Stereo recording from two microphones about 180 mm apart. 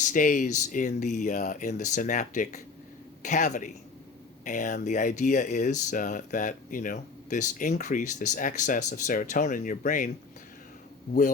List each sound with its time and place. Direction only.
0.0 s speech: 45° left (ahead or behind)